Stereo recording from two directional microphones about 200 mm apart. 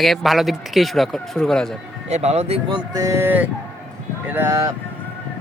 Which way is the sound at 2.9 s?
15° right (ahead or behind).